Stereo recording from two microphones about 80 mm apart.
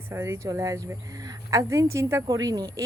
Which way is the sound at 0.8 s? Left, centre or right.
Right.